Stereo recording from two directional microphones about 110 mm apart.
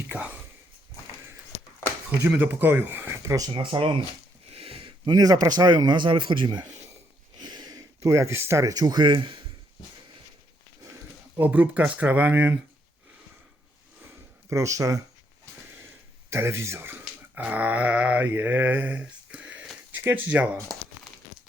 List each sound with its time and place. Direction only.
0.1 s speech: 15° right (ahead or behind)
2.4 s speech: 20° right (ahead or behind)
3.5 s speech: 45° right (ahead or behind)
4.4 s speech: 65° right (ahead or behind); by 9.4 s 50° right (ahead or behind)
11.3 s speech: 15° right (ahead or behind)
14.5 s speech: 30° right (ahead or behind)
16.3 s speech: 25° right (ahead or behind)